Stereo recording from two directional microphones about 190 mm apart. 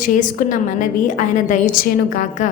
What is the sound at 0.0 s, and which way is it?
A woman's voice, 45° left (ahead or behind).